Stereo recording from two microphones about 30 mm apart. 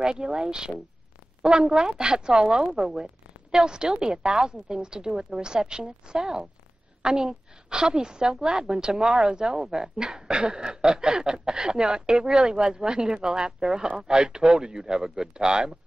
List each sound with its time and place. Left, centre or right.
0.0 s a woman's voice: right